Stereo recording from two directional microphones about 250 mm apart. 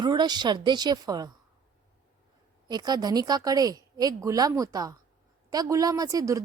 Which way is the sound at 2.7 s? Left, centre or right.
Centre.